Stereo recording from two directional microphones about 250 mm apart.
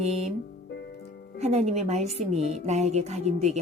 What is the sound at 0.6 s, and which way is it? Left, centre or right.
Music, left.